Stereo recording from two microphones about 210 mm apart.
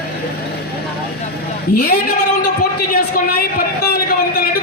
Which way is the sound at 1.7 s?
45° left (ahead or behind).